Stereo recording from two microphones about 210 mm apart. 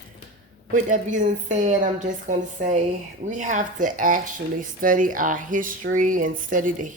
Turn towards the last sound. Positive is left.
turn(degrees=-40)  # may be behind; listen again after turning